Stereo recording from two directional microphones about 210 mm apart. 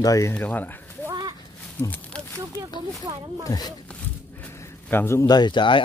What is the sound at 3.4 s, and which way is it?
Speech, 15° left (ahead or behind).